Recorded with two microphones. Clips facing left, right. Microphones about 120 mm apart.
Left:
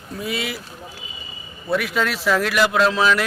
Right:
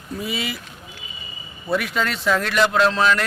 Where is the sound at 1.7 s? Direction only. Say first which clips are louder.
Left 1 dB; centre (ahead or behind).